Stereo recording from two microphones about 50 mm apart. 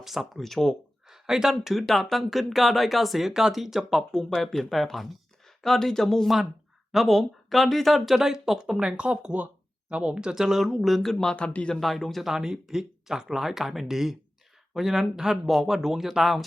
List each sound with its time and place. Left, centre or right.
0.0 s speech: centre
0.3 s speech: centre
1.0 s speech: centre
4.1 s speech: centre
11.1 s speech: centre
11.3 s speech: left
11.7 s speech: centre
12.3 s speech: centre